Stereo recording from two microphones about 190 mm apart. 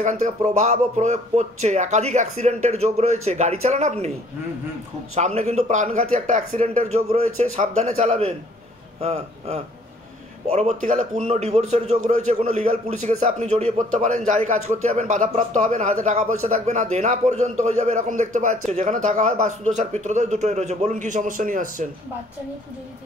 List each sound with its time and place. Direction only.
0.0 s a man's voice: 40° right (ahead or behind)
5.1 s a man's voice: 35° right (ahead or behind)